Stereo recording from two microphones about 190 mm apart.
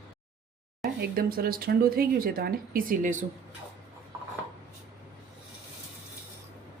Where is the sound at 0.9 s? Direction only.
55° right (ahead or behind).